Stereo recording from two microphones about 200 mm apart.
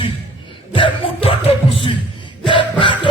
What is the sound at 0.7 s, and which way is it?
Music, 25° left (ahead or behind).